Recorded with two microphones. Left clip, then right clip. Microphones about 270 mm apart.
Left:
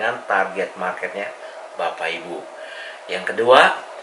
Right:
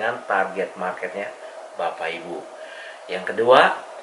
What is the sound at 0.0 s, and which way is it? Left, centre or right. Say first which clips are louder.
A man's voice: left 2 dB; centre.